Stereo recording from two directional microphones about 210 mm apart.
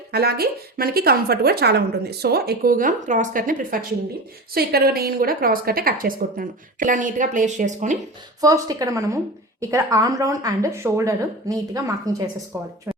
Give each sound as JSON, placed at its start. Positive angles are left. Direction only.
{"t": 0.1, "sound": "a woman's voice", "side_deg": -50}
{"t": 8.4, "sound": "speech", "side_deg": -15}